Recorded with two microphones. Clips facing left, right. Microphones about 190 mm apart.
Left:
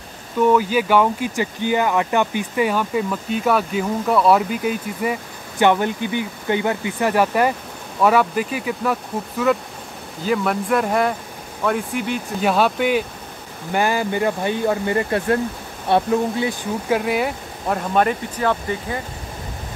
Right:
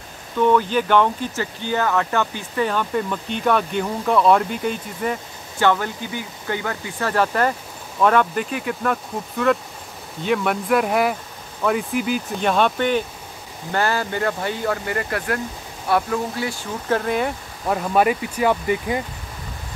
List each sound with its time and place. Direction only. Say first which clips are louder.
0.4 s speech: left 1 dB; 10° left (ahead or behind); by 16.5 s 25° left (ahead or behind)
16.9 s speech: even; 5° left (ahead or behind)
17.9 s speech: right 1 dB; 10° right (ahead or behind)